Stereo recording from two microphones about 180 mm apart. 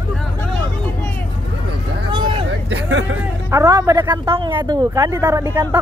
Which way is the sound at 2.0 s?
25° right (ahead or behind).